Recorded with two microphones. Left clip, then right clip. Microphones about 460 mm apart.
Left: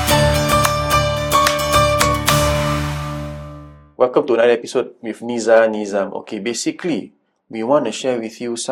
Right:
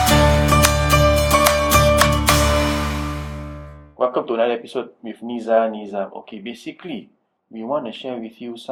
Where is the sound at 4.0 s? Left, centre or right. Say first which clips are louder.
Left 5 dB; left.